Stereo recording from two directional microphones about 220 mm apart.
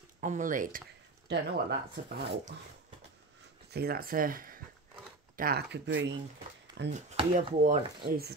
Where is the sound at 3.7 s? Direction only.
45° right (ahead or behind).